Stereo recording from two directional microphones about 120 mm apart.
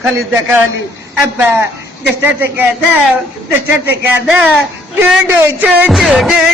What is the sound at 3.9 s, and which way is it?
Speech, 15° right (ahead or behind).